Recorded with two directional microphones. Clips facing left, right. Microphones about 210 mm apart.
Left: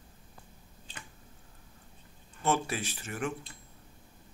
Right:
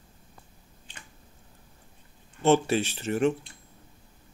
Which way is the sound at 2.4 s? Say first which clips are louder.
Right 9 dB; 25° right (ahead or behind).